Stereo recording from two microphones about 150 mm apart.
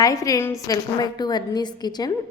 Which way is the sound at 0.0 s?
20° left (ahead or behind).